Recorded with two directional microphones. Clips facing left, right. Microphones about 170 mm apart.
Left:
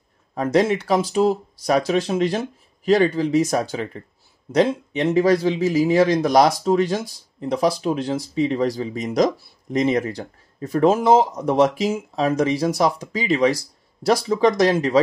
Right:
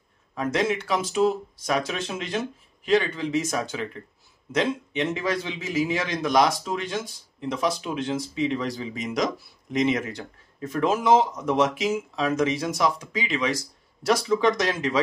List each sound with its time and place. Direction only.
0.3 s a man's voice: 35° left (ahead or behind)